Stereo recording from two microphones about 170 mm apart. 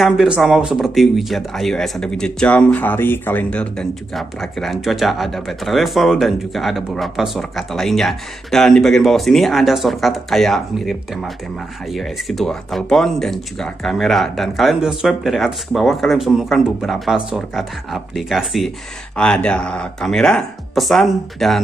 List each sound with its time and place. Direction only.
0.0 s speech: centre (ahead or behind)